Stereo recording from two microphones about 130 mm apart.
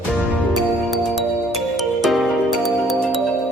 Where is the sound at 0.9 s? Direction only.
Centre (ahead or behind).